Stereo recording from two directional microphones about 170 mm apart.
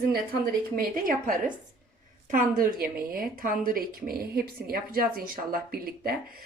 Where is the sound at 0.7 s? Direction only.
55° right (ahead or behind).